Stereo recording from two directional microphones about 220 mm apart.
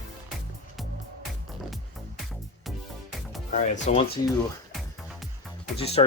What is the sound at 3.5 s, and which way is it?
Speech, 35° left (ahead or behind).